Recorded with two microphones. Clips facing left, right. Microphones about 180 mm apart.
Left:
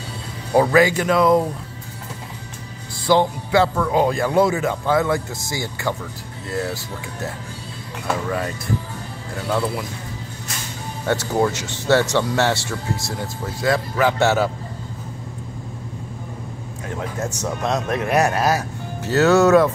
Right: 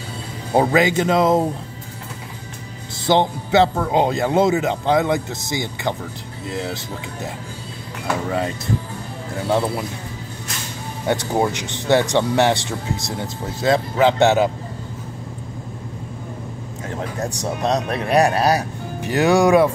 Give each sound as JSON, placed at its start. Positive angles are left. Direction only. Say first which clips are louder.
{"t": 0.6, "sound": "speech", "louder": "left 1 dB", "side_deg": -20}
{"t": 3.1, "sound": "speech", "louder": "even", "side_deg": -25}
{"t": 9.5, "sound": "speech", "louder": "right 2 dB", "side_deg": -25}
{"t": 11.1, "sound": "speech", "louder": "even", "side_deg": -15}
{"t": 17.2, "sound": "a man's voice", "louder": "even", "side_deg": -35}
{"t": 17.6, "sound": "speech", "louder": "right 1 dB", "side_deg": -20}
{"t": 18.1, "sound": "a man's voice", "louder": "right 3 dB", "side_deg": -35}
{"t": 18.9, "sound": "speech", "louder": "left 1 dB", "side_deg": -15}